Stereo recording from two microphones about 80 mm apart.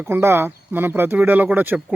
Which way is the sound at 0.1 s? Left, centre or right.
Right.